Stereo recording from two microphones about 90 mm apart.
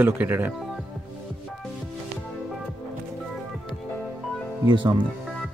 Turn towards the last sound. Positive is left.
turn(degrees=-55)  # may be behind; listen again after turning